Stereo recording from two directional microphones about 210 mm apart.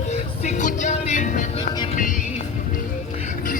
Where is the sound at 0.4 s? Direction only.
35° left (ahead or behind).